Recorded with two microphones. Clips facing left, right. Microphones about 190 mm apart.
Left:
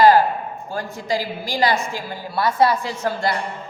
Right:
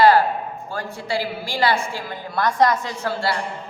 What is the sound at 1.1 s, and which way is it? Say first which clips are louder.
Speech: left 1 dB; 40° left (ahead or behind).